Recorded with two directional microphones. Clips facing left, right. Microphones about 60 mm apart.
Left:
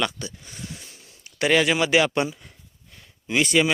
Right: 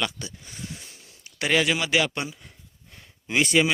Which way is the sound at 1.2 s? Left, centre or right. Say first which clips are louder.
Left 3 dB; centre.